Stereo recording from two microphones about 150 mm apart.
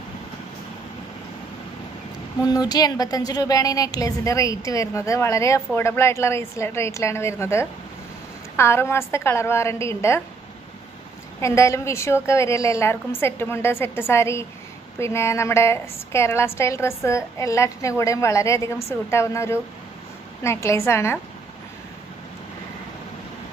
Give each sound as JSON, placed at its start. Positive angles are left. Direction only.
{"t": 2.4, "sound": "a woman's voice", "side_deg": 25}
{"t": 11.4, "sound": "a woman's voice", "side_deg": 20}